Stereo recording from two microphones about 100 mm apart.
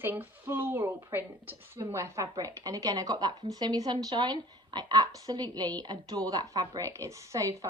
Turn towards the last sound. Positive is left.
turn(degrees=-35)  # may be behind; listen again after turning